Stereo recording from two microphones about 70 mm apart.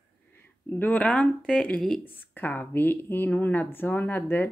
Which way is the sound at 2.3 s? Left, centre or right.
Left.